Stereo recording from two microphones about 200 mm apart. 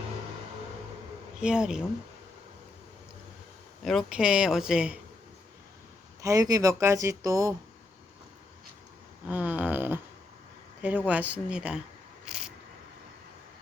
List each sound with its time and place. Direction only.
1.4 s speech: 5° right (ahead or behind)
3.8 s speech: centre (ahead or behind)
6.2 s speech: 15° right (ahead or behind)
9.2 s a sound: 5° right (ahead or behind)
10.8 s speech: 5° right (ahead or behind)
12.2 s a sound: 5° right (ahead or behind)